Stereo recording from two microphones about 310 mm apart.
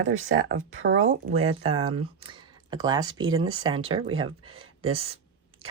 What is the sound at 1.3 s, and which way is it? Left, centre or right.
Speech, centre.